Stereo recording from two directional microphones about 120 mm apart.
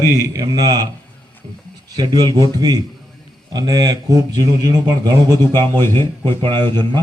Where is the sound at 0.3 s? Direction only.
30° right (ahead or behind).